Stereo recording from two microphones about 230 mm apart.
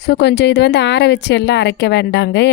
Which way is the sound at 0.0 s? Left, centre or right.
Left.